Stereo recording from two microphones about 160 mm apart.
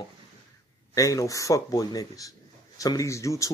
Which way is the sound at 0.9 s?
20° left (ahead or behind).